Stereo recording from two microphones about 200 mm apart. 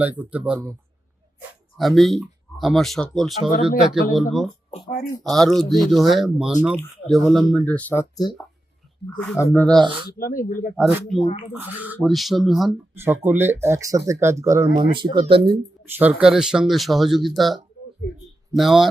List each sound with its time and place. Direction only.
0.0 s speech: 10° right (ahead or behind)
1.4 s speech: centre (ahead or behind)
10.2 s speech: 45° left (ahead or behind)
10.8 s speech: centre (ahead or behind)
11.2 s speech: 30° left (ahead or behind)
11.5 s speech: 10° right (ahead or behind)
14.9 s speech: 25° right (ahead or behind)
16.0 s speech: 5° right (ahead or behind)